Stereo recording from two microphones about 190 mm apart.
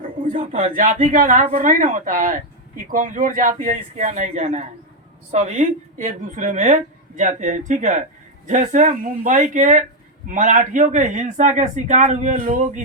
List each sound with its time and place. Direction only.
0.5 s a woman's voice: 40° right (ahead or behind)